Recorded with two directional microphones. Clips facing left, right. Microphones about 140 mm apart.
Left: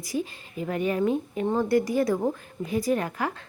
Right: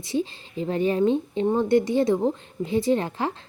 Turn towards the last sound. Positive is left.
turn(degrees=-25)  # may be behind; listen again after turning